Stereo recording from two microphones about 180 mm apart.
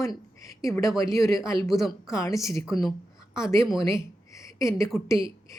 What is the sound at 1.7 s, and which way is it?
Speech, centre (ahead or behind).